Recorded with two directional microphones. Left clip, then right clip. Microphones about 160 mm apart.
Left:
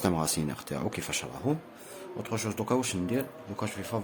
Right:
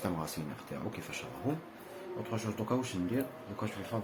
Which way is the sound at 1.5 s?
90° left.